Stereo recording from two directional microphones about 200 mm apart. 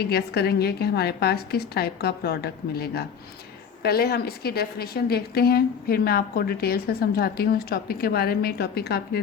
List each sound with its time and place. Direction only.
0.0 s a woman's voice: 50° left (ahead or behind)